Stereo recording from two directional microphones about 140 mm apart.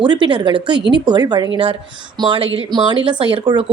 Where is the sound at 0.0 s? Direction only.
35° right (ahead or behind).